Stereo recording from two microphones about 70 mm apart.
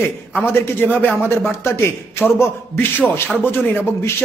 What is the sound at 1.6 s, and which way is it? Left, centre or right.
A man's voice, left.